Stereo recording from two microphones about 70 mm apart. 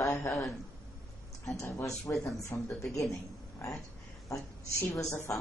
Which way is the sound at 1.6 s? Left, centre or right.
Left.